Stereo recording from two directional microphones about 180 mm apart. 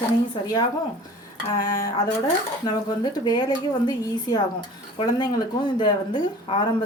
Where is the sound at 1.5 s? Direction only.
20° left (ahead or behind).